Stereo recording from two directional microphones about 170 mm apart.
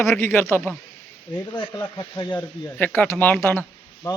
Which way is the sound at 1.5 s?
25° left (ahead or behind).